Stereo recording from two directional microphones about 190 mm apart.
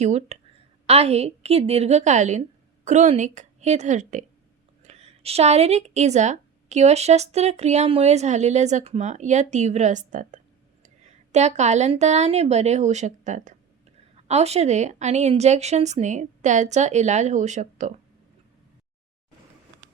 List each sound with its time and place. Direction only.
0.0 s a woman's voice: 35° right (ahead or behind)